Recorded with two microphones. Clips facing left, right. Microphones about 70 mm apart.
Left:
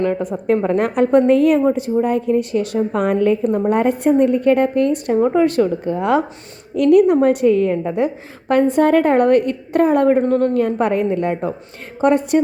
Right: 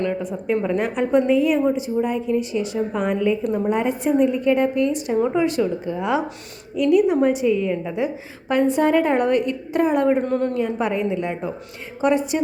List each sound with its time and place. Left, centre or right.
0.0 s a woman's voice: left
0.8 s a woman's voice: left
7.7 s a woman's voice: left